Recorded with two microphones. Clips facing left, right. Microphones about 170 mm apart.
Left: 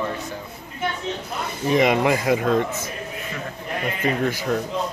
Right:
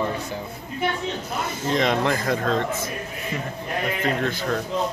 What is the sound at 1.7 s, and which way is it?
Speech, 15° left (ahead or behind).